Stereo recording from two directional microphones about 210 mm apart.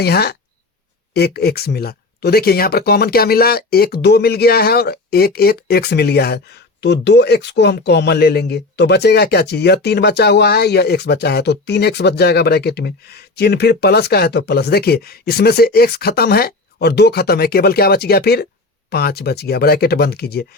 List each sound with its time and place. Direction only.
0.0 s speech: 50° left (ahead or behind)